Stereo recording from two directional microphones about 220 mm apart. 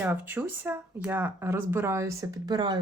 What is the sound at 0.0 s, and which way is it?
Speech, 10° right (ahead or behind).